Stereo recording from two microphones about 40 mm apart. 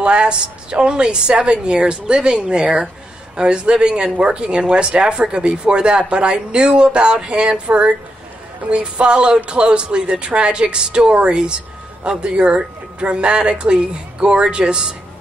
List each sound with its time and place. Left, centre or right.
0.0 s speech: right